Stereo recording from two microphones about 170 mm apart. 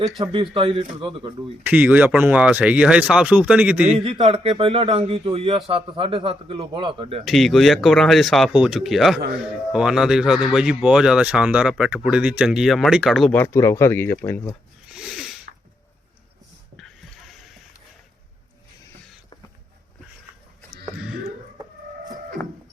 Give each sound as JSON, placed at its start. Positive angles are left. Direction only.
{"t": 0.2, "sound": "speech", "side_deg": -30}
{"t": 1.6, "sound": "speech", "side_deg": -10}
{"t": 4.0, "sound": "speech", "side_deg": -35}
{"t": 7.3, "sound": "speech", "side_deg": 0}
{"t": 13.3, "sound": "speech", "side_deg": 15}
{"t": 14.8, "sound": "a sound", "side_deg": -5}
{"t": 16.7, "sound": "a sound", "side_deg": 0}